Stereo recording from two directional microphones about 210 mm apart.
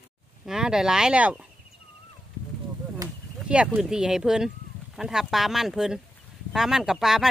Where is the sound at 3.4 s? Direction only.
5° right (ahead or behind).